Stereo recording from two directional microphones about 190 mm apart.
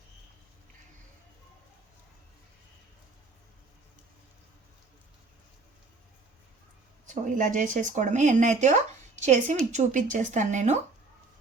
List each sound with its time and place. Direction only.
7.1 s speech: 45° right (ahead or behind)